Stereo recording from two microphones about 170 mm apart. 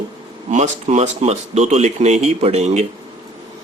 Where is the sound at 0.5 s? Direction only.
40° right (ahead or behind).